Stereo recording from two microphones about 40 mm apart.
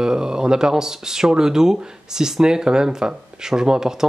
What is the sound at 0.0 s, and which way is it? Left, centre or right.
Speech, centre.